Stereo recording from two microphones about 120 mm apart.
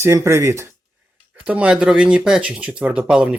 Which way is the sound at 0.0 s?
25° right (ahead or behind).